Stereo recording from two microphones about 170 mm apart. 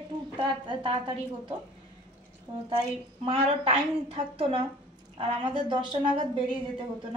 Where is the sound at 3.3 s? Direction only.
35° right (ahead or behind).